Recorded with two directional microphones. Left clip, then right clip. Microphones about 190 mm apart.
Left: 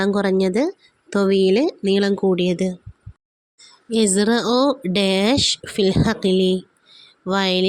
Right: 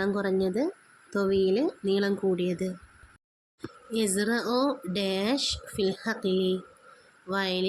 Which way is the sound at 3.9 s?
40° left (ahead or behind).